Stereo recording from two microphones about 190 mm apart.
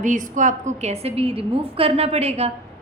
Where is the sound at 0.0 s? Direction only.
40° right (ahead or behind).